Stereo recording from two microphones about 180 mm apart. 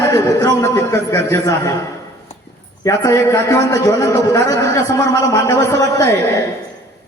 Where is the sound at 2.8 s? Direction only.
20° left (ahead or behind).